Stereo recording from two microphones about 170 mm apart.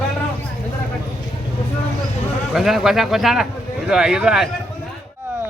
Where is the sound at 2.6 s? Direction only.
Centre (ahead or behind).